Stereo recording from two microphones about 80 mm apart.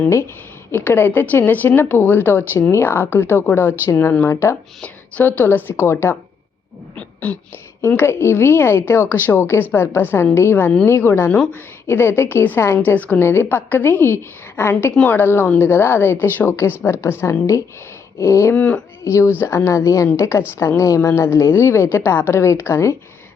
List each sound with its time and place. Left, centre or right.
0.7 s a woman's voice: left
4.8 s a woman's voice: centre
6.9 s a sound: centre
7.9 s a woman's voice: left
18.5 s speech: centre
19.0 s a woman's voice: left